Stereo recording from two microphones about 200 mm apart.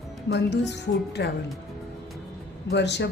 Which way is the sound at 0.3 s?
60° left (ahead or behind).